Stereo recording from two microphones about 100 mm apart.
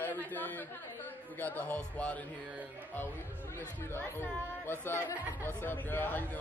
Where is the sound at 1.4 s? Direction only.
20° left (ahead or behind).